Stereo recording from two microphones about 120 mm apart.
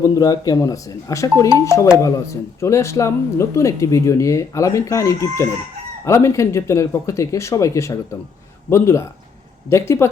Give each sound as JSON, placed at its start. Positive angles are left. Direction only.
{"t": 0.0, "sound": "speech", "side_deg": 30}